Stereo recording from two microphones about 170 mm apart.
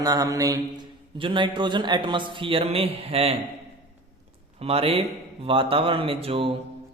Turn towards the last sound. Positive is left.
turn(degrees=-30)  # may be behind; listen again after turning